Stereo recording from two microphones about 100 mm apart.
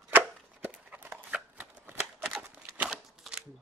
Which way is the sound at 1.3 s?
15° right (ahead or behind).